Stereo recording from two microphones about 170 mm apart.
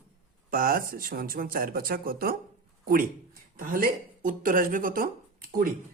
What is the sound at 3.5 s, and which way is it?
Speech, 55° right (ahead or behind).